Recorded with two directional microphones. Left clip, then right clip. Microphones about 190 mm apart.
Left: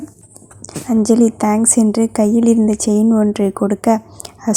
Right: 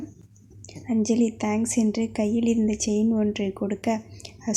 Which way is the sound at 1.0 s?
30° left (ahead or behind).